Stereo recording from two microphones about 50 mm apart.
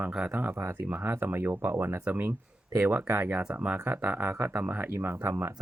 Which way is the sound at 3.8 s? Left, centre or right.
Right.